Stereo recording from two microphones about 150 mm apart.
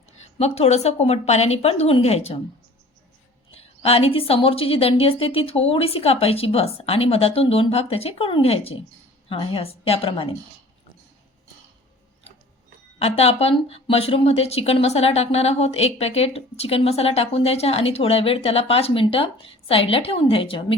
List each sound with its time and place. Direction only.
0.3 s a woman's voice: 45° left (ahead or behind)
3.5 s speech: 40° left (ahead or behind)
13.0 s speech: 45° left (ahead or behind)